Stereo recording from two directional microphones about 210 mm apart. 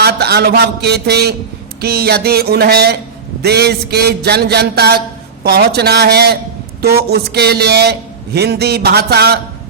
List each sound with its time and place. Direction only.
0.0 s a man's voice: 50° right (ahead or behind)